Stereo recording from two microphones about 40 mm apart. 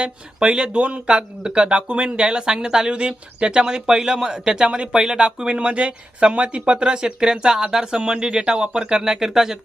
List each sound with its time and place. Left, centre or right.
0.0 s speech: right